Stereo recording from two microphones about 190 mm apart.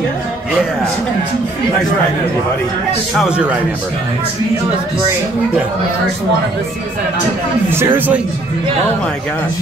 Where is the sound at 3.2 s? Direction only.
5° right (ahead or behind).